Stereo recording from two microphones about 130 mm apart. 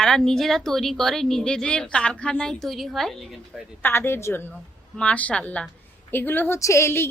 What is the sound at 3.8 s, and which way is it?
A woman's voice, 15° left (ahead or behind).